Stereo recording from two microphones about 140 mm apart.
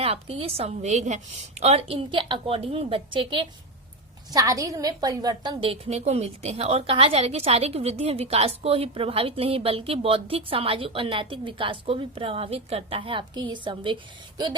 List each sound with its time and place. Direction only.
0.0 s a woman's voice: 45° right (ahead or behind)
4.3 s a woman's voice: 25° right (ahead or behind)